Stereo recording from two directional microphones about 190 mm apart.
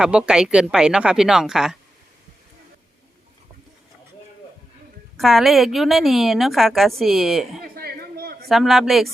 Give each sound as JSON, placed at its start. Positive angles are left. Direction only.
{"t": 0.0, "sound": "a woman's voice", "side_deg": -5}
{"t": 5.1, "sound": "a woman's voice", "side_deg": 0}
{"t": 7.6, "sound": "a sound", "side_deg": -55}
{"t": 8.4, "sound": "a woman's voice", "side_deg": 0}